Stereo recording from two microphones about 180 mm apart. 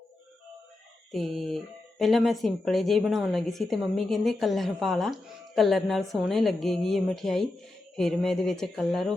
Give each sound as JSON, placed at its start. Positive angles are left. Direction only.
{"t": 1.1, "sound": "speech", "side_deg": 0}